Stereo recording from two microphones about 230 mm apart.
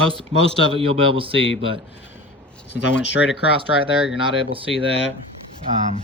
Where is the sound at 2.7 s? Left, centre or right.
Left.